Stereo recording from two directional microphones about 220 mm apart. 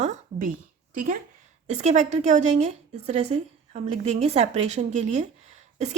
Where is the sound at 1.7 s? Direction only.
30° right (ahead or behind).